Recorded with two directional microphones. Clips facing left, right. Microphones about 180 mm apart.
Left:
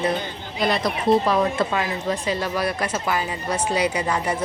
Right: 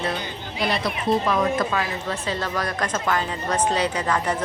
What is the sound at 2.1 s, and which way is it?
Speech, 15° left (ahead or behind).